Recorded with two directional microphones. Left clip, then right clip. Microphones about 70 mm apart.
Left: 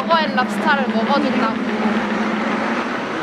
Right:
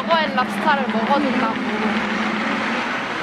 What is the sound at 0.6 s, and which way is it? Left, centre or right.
Speech, left.